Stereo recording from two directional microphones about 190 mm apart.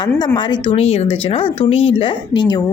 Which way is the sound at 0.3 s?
25° left (ahead or behind).